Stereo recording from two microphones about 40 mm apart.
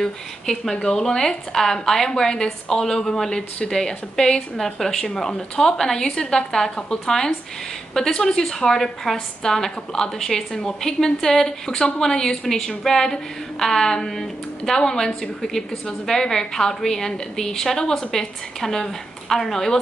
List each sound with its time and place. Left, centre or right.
0.0 s a woman's voice: centre